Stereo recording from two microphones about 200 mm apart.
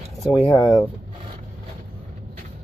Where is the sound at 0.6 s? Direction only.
15° left (ahead or behind).